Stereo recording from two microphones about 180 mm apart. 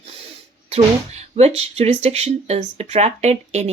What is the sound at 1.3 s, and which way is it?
Speech, 35° right (ahead or behind).